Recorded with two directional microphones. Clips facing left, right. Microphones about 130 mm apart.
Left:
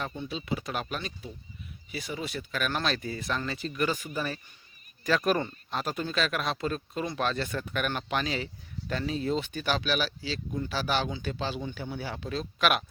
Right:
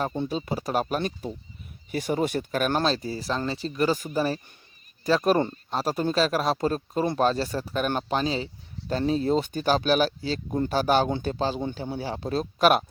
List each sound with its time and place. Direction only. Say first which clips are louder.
0.2 s speech: right 5 dB; 45° right (ahead or behind)